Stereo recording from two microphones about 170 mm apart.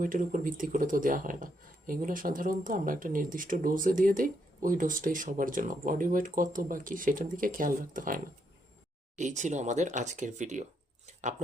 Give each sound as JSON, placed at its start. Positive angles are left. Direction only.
{"t": 0.0, "sound": "speech", "side_deg": -50}